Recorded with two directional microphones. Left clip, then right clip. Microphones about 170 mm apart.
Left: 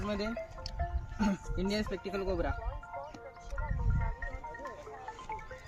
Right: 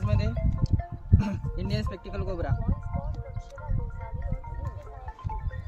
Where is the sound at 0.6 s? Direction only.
90° right.